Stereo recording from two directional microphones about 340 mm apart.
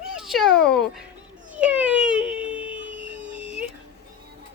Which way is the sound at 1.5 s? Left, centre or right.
Centre.